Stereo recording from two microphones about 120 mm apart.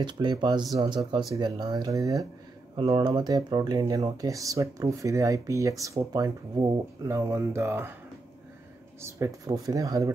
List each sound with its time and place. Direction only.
0.0 s speech: 40° right (ahead or behind); by 7.9 s 20° right (ahead or behind)
9.0 s speech: 25° right (ahead or behind)